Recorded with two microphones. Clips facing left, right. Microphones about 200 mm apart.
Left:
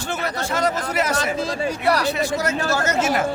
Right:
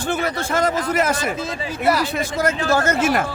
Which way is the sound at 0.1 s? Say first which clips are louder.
Right 3 dB; 50° right (ahead or behind).